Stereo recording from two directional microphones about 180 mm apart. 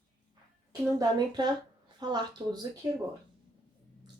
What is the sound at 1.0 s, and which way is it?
Speech, 25° right (ahead or behind).